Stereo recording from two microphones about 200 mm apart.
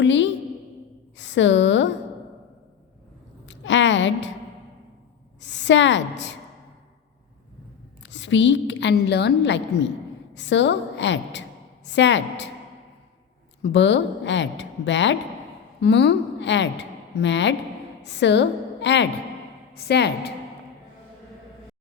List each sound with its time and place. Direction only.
0.0 s a woman's voice: 65° left (ahead or behind)
3.5 s a sound: 65° left (ahead or behind)
5.4 s a woman's voice: 65° left (ahead or behind)
8.0 s a woman's voice: 65° left (ahead or behind)
13.6 s a woman's voice: 65° left (ahead or behind)